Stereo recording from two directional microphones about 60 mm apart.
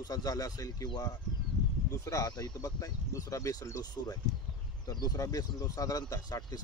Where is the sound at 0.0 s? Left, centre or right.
Left.